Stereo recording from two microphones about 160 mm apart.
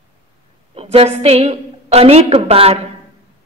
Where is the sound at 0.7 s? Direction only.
40° right (ahead or behind).